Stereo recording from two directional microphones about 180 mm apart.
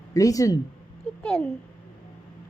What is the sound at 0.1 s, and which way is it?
Speech, 20° left (ahead or behind).